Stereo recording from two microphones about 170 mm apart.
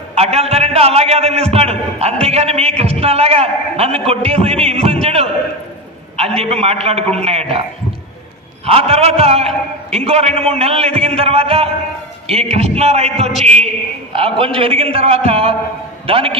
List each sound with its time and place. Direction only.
0.1 s a man's voice: 40° right (ahead or behind)
5.0 s a sound: 35° right (ahead or behind)
6.1 s a man's voice: 35° right (ahead or behind)
8.6 s a man's voice: 35° right (ahead or behind)